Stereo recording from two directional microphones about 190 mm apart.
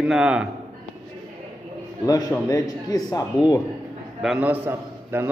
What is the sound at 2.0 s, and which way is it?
A man's voice, 20° left (ahead or behind).